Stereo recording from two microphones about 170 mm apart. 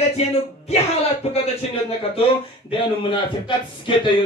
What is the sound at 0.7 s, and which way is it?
A man's voice, 35° left (ahead or behind).